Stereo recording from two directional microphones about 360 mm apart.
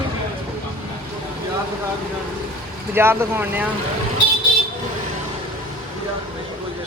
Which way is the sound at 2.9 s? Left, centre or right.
Centre.